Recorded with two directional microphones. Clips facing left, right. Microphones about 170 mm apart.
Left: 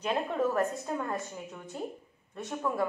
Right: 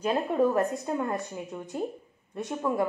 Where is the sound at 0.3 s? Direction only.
15° right (ahead or behind).